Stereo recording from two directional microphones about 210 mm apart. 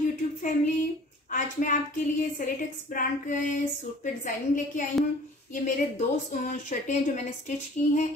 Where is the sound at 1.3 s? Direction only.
35° left (ahead or behind).